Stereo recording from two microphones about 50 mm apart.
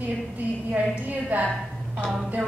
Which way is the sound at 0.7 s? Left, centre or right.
Right.